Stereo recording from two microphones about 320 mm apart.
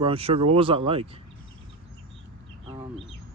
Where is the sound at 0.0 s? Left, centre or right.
Centre.